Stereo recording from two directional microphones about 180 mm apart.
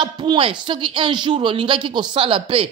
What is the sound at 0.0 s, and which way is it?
Speech, 25° right (ahead or behind).